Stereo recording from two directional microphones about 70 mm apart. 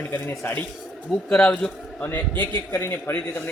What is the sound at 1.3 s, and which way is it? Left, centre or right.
Speech, centre.